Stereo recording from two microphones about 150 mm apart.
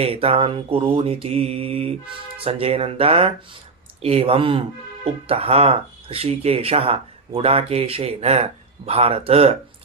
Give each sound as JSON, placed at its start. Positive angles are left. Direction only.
{"t": 0.0, "sound": "speech", "side_deg": -40}